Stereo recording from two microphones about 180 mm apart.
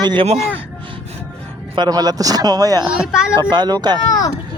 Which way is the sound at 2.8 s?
5° right (ahead or behind).